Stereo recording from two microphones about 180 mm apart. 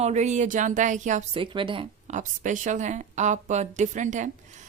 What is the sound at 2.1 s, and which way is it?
A woman's voice, 45° right (ahead or behind).